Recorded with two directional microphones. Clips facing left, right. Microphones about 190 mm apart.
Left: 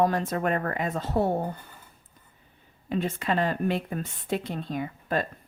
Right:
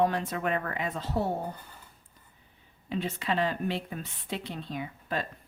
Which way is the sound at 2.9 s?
50° left (ahead or behind).